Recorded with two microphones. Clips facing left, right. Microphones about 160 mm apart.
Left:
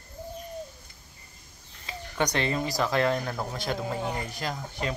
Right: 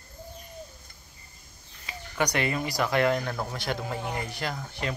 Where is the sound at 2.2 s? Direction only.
25° left (ahead or behind).